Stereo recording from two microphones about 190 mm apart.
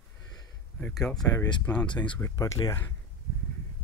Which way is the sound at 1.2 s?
20° left (ahead or behind).